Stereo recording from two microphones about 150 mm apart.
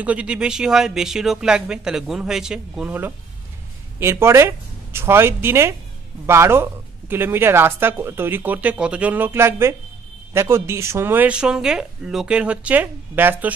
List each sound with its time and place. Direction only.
0.0 s speech: 10° right (ahead or behind)